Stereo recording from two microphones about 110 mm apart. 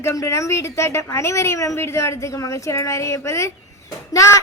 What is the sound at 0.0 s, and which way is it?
A woman's voice, 25° left (ahead or behind).